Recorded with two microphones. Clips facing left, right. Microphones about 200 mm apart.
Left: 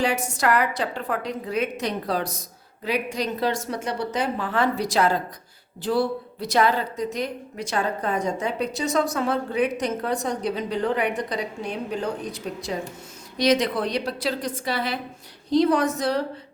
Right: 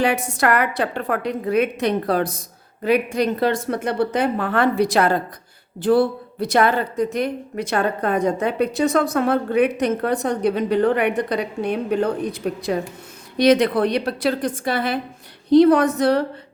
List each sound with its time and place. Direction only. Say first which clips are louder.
0.0 s a woman's voice: right 4 dB; 60° right (ahead or behind)